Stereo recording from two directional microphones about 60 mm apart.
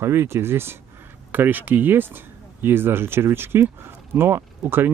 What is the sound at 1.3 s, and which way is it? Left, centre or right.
Speech, right.